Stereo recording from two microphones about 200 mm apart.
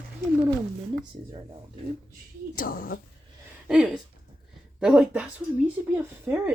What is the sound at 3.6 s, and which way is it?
Speech, 5° right (ahead or behind).